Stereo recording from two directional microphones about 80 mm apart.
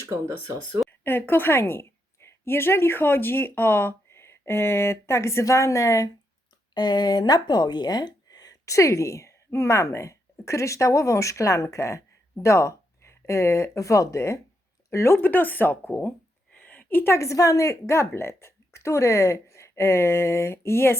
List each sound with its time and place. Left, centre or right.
0.0 s speech: right
1.0 s a woman's voice: left
6.7 s a woman's voice: left